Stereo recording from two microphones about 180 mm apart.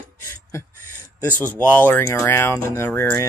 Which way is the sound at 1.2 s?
10° left (ahead or behind).